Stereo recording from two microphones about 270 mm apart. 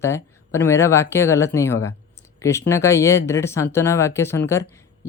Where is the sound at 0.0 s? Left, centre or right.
Centre.